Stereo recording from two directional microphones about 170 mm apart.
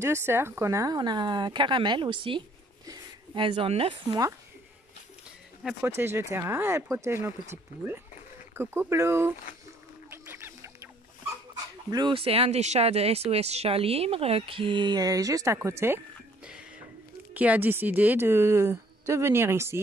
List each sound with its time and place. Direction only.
0.0 s speech: 15° right (ahead or behind); by 4.2 s 35° right (ahead or behind)
5.6 s speech: 5° right (ahead or behind)
5.9 s a woman's voice: 15° right (ahead or behind)
8.5 s a woman's voice: 15° right (ahead or behind)
10.0 s music: 15° right (ahead or behind)
11.9 s speech: 30° right (ahead or behind)
16.4 s a sound: 5° right (ahead or behind)
17.3 s a woman's voice: 10° right (ahead or behind)